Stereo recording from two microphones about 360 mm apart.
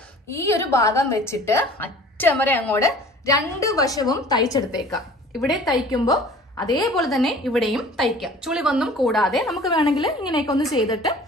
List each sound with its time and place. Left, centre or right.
0.3 s a woman's voice: centre
5.7 s a woman's voice: centre
9.7 s a woman's voice: centre
10.0 s a woman's voice: centre